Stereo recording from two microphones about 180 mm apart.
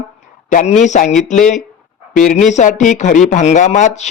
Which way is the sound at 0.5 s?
40° left (ahead or behind).